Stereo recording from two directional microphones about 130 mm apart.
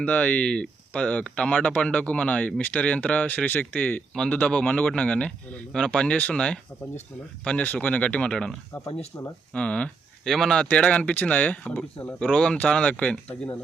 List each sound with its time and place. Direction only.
0.0 s speech: 10° left (ahead or behind)
9.1 s speech: 25° left (ahead or behind)
9.5 s speech: 10° left (ahead or behind)